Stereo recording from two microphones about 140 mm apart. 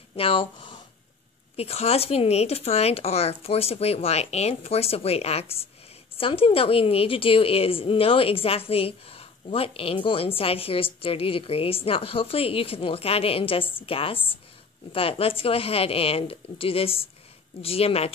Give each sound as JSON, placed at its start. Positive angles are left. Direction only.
{"t": 0.1, "sound": "a woman's voice", "side_deg": 40}